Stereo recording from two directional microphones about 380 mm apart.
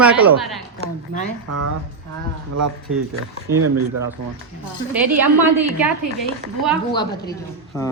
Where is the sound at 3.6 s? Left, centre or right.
Right.